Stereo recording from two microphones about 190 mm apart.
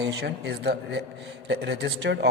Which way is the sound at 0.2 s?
60° right (ahead or behind).